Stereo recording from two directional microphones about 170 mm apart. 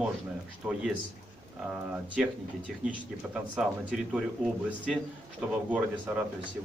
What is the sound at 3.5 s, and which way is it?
Speech, 5° right (ahead or behind).